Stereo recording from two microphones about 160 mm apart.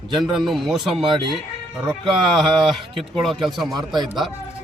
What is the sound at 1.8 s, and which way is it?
Speech, 30° right (ahead or behind).